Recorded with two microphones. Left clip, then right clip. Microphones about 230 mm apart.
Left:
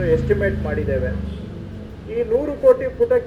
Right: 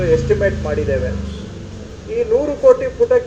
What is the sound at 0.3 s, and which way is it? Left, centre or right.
Speech, left.